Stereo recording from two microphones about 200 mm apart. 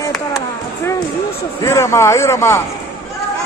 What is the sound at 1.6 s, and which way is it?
Speech, 15° left (ahead or behind).